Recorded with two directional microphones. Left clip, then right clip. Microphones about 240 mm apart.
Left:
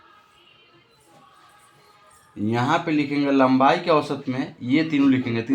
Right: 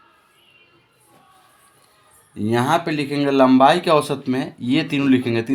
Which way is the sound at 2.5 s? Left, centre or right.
Right.